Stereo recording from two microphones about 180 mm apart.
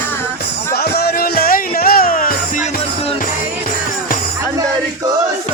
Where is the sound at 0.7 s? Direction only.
60° left (ahead or behind).